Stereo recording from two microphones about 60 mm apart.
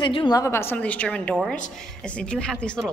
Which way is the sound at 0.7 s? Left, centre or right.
Left.